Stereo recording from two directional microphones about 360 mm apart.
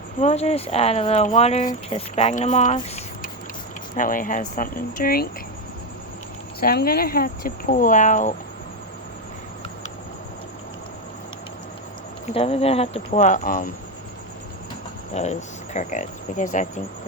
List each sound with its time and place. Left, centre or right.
0.2 s speech: centre
6.6 s speech: left
12.3 s speech: centre
15.1 s speech: centre